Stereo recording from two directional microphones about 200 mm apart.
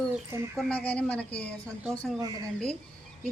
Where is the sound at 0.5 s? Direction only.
5° left (ahead or behind).